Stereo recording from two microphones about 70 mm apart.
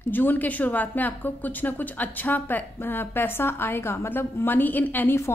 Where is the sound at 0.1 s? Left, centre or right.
Left.